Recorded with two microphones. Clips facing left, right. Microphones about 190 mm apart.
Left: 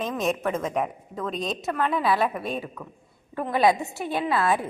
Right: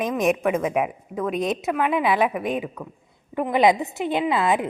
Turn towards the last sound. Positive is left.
turn(degrees=-20)  # may be behind; listen again after turning